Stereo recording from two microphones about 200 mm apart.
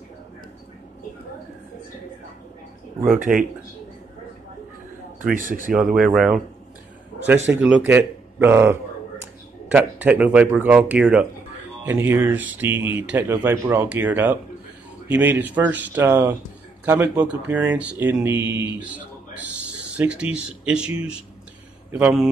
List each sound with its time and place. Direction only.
3.2 s speech: 40° right (ahead or behind)
5.3 s speech: 40° right (ahead or behind)
5.7 s speech: 5° right (ahead or behind)
7.5 s speech: 10° right (ahead or behind)